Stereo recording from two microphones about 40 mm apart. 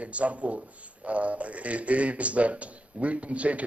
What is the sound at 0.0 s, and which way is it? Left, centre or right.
A man's voice, right.